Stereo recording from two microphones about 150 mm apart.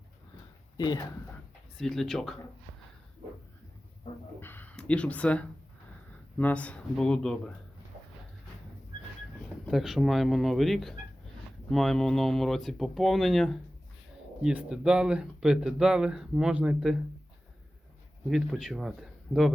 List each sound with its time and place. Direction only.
0.8 s speech: 30° left (ahead or behind)
1.8 s speech: centre (ahead or behind)
4.4 s speech: 15° left (ahead or behind)
9.6 s speech: centre (ahead or behind)
18.3 s speech: centre (ahead or behind)